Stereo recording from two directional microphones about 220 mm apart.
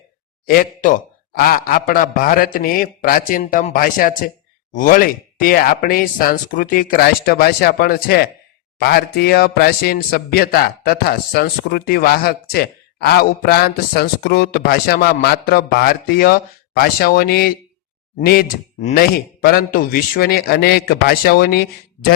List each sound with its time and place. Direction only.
0.4 s a man's voice: 40° left (ahead or behind)